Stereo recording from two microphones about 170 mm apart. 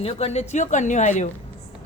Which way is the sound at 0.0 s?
40° left (ahead or behind).